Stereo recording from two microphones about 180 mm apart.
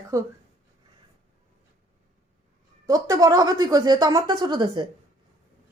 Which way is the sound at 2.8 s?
20° right (ahead or behind).